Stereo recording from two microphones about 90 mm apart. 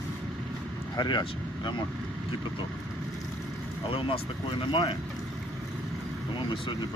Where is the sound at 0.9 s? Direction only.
55° left (ahead or behind).